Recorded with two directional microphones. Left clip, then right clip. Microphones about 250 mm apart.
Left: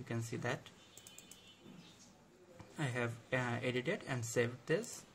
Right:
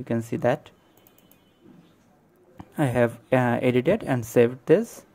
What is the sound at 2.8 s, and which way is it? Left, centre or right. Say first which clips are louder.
Speech: right 18 dB; right.